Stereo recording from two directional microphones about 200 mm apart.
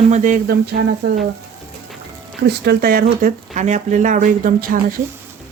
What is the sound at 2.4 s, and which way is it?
Speech, 55° right (ahead or behind).